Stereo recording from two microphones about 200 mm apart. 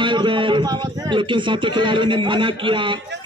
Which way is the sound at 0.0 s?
25° right (ahead or behind).